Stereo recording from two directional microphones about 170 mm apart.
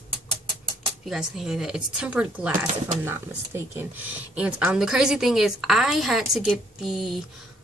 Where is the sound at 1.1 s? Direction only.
5° right (ahead or behind).